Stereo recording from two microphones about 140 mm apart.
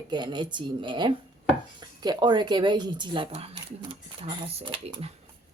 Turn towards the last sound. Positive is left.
turn(degrees=-40)  # may be behind; listen again after turning